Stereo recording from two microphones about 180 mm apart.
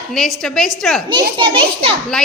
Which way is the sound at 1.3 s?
30° right (ahead or behind).